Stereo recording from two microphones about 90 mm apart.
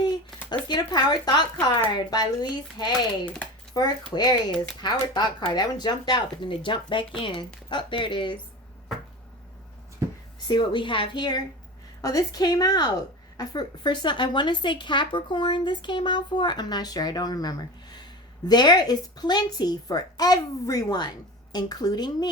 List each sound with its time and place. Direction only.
0.7 s a woman's voice: 55° left (ahead or behind)
10.5 s speech: 65° left (ahead or behind)
12.0 s a woman's voice: 40° left (ahead or behind)